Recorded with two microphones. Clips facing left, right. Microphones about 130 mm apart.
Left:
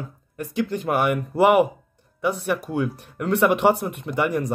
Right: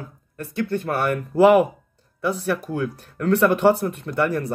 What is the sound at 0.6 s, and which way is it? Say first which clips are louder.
Speech: left 1 dB; 15° left (ahead or behind).